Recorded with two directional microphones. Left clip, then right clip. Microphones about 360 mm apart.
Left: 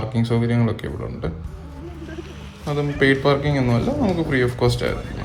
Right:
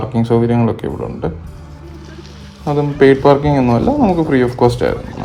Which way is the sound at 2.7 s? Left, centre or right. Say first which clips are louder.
Right 8 dB; right.